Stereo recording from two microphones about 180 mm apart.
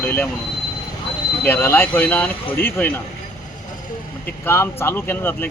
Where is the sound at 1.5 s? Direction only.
10° left (ahead or behind).